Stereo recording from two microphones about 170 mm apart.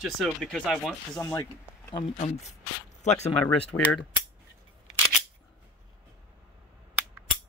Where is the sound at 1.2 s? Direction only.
15° left (ahead or behind).